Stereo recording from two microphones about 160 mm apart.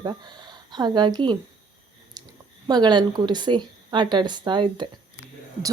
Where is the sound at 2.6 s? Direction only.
25° right (ahead or behind).